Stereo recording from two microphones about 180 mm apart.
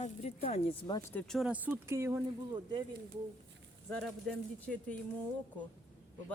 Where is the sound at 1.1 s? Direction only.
5° left (ahead or behind); by 2.8 s 20° right (ahead or behind).